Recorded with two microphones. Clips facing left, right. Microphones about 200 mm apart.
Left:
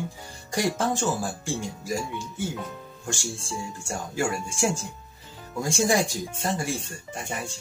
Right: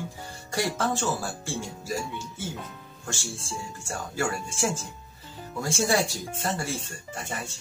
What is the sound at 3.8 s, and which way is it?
Speech, 15° left (ahead or behind).